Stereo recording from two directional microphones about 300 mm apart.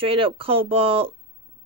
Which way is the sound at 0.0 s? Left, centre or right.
Centre.